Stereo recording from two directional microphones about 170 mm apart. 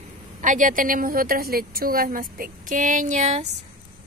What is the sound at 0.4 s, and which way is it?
A woman's voice, 50° right (ahead or behind).